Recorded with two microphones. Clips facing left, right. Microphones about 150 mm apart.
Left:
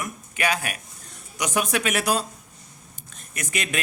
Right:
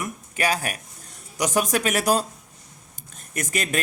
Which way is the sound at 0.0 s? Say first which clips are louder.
Right 1 dB; 35° right (ahead or behind).